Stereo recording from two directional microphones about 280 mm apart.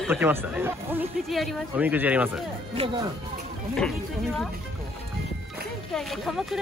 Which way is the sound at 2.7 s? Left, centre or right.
Centre.